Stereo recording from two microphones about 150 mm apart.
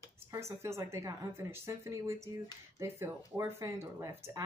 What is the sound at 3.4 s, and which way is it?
A woman's voice, 20° right (ahead or behind).